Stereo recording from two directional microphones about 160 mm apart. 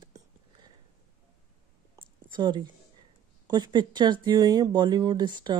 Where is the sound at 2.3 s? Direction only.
30° right (ahead or behind).